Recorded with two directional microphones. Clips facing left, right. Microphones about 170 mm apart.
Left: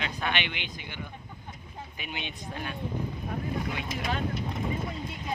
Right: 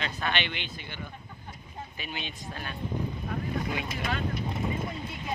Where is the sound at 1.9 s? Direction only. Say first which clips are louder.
Left 1 dB; 15° left (ahead or behind).